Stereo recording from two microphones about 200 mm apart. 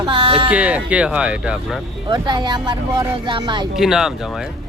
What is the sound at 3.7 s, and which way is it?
Speech, centre (ahead or behind).